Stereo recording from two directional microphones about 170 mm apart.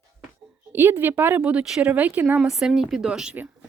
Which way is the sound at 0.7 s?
10° right (ahead or behind).